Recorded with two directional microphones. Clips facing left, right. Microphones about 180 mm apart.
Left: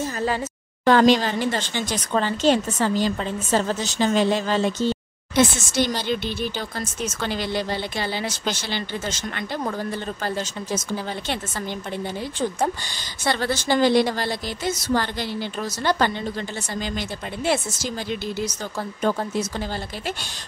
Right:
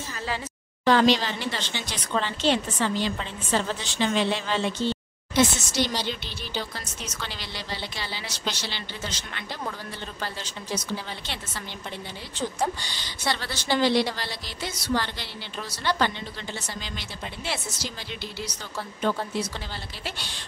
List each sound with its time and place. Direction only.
0.0 s a sound: 45° left (ahead or behind)
0.8 s speech: 50° left (ahead or behind)
12.4 s speech: 50° left (ahead or behind)